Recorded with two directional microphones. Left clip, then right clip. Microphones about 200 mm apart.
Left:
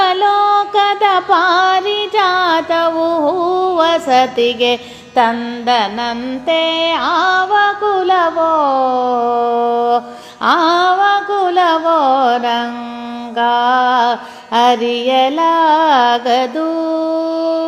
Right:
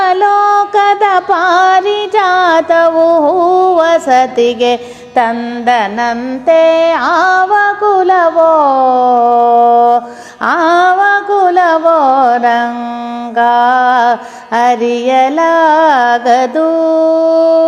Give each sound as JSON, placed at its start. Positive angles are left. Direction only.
{"t": 0.0, "sound": "music", "side_deg": -25}